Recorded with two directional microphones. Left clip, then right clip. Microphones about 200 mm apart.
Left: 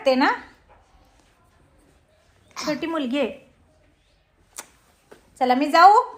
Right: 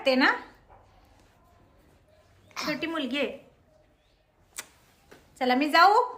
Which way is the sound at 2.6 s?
10° left (ahead or behind).